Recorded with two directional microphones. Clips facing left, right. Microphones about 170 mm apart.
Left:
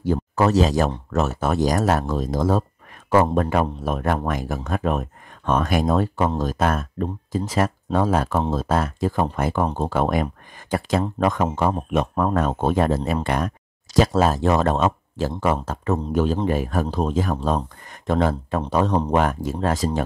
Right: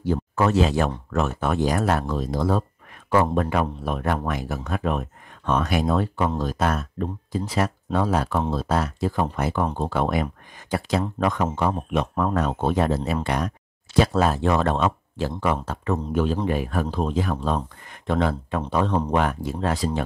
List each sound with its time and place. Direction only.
0.0 s speech: 45° left (ahead or behind)
13.9 s speech: 40° left (ahead or behind)